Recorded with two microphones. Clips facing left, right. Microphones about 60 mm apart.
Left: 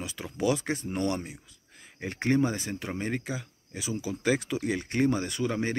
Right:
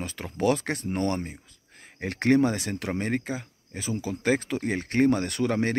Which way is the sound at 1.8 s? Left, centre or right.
Right.